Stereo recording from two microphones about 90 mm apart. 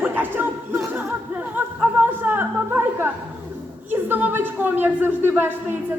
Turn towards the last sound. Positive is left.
turn(degrees=-20)  # may be behind; listen again after turning